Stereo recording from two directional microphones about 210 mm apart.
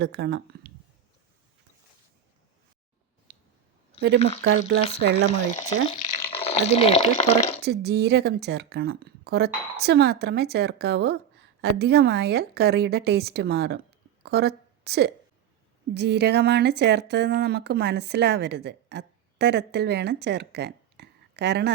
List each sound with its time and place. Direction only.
0.0 s speech: 55° right (ahead or behind)
3.3 s a sound: 45° right (ahead or behind)
4.0 s speech: 55° right (ahead or behind)
6.3 s speech: 30° left (ahead or behind)
7.6 s a woman's voice: 50° right (ahead or behind)